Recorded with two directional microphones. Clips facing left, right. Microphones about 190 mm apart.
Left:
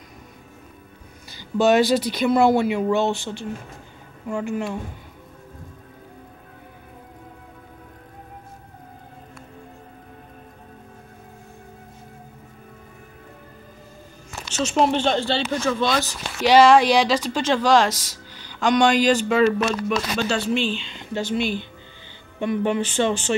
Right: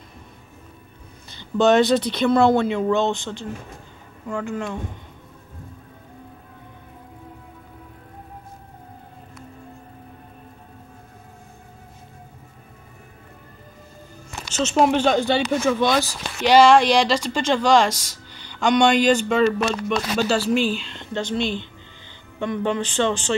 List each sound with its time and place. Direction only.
1.6 s speech: 5° left (ahead or behind)
14.4 s speech: 10° right (ahead or behind)
16.3 s speech: 5° left (ahead or behind)
22.6 s speech: 15° left (ahead or behind)